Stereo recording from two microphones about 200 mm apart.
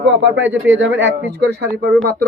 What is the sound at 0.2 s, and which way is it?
Speech, 65° right (ahead or behind).